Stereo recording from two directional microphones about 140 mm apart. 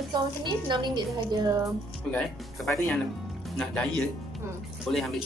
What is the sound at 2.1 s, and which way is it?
Speech, 10° left (ahead or behind).